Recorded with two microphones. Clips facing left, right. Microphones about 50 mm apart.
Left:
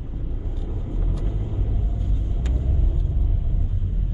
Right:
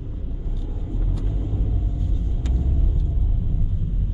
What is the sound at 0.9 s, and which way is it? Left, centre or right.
Vehicle, centre.